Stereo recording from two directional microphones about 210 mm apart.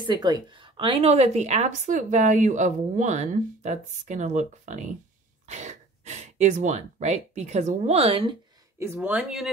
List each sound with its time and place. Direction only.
0.0 s a woman's voice: 20° right (ahead or behind)
8.7 s speech: 10° right (ahead or behind)